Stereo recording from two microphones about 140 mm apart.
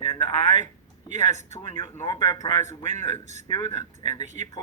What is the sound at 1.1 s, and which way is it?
Speech, 60° right (ahead or behind).